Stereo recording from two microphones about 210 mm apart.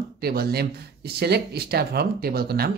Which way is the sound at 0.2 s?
50° right (ahead or behind).